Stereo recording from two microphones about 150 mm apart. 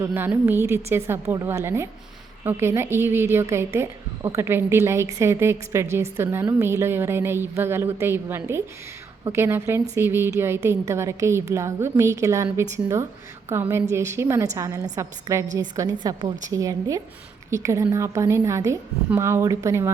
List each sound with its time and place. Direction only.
0.0 s a woman's voice: 15° right (ahead or behind)